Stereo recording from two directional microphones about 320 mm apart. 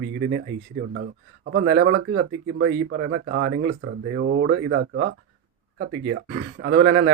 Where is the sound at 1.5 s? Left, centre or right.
Right.